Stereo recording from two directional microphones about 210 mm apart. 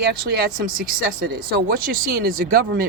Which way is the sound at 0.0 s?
50° right (ahead or behind).